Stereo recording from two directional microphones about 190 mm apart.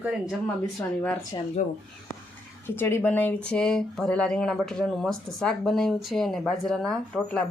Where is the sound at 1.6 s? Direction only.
45° left (ahead or behind).